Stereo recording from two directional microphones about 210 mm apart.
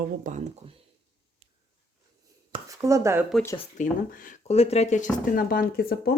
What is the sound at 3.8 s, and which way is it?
Speech, 35° left (ahead or behind).